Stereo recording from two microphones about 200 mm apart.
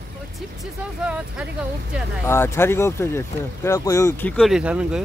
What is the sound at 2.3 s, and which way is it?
Speech, 10° left (ahead or behind).